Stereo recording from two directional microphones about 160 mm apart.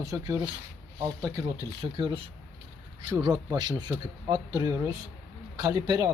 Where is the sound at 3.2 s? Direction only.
25° right (ahead or behind).